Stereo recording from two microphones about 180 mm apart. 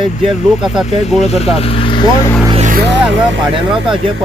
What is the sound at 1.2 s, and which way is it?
Speech, 35° left (ahead or behind).